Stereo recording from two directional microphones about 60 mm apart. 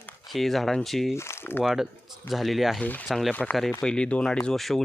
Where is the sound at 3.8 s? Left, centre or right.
Centre.